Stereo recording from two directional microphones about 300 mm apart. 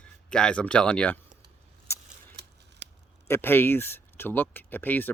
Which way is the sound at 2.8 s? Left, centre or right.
Right.